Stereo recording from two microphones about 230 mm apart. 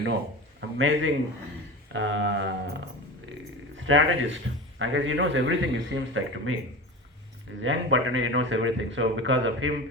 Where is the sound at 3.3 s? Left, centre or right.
Right.